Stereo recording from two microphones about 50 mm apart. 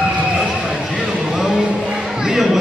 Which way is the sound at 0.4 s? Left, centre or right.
Centre.